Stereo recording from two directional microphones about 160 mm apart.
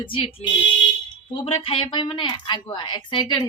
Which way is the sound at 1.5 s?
35° left (ahead or behind).